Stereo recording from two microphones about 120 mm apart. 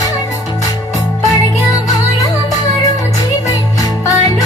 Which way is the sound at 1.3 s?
30° left (ahead or behind).